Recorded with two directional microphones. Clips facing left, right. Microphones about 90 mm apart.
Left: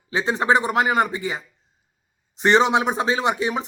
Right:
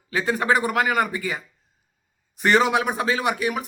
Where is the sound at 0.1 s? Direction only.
25° left (ahead or behind).